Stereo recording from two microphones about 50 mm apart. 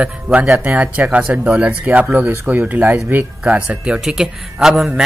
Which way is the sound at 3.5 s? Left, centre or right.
Centre.